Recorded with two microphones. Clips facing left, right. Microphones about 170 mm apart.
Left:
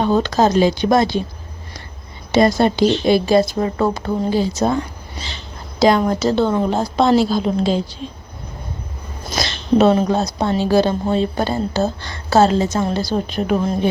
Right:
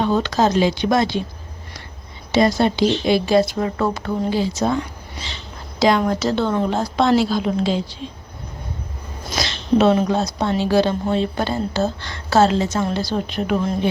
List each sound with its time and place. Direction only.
0.0 s speech: 40° left (ahead or behind)
2.3 s speech: 50° left (ahead or behind)
5.8 s speech: 40° left (ahead or behind)
9.4 s speech: 40° left (ahead or behind)